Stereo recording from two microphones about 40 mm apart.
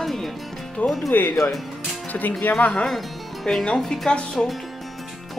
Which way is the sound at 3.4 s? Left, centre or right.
Centre.